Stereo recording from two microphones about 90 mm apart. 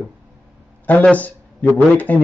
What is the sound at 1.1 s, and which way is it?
A man's voice, 15° left (ahead or behind).